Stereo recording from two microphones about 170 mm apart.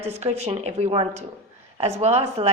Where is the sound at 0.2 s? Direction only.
40° right (ahead or behind).